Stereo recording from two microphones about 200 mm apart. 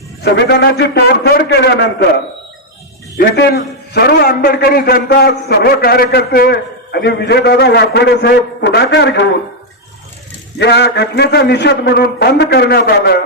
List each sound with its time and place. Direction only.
0.2 s a man's voice: 55° left (ahead or behind)
3.2 s a man's voice: 55° left (ahead or behind)
10.6 s a man's voice: 55° left (ahead or behind)